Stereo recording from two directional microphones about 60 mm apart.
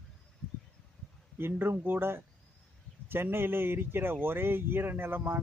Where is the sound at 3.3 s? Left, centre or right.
Right.